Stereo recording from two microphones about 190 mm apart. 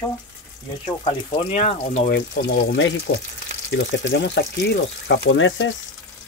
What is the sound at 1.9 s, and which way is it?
Speech, 60° left (ahead or behind).